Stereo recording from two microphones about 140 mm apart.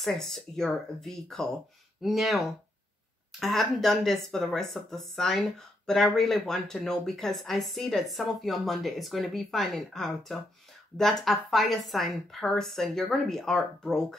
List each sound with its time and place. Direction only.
0.0 s speech: centre (ahead or behind)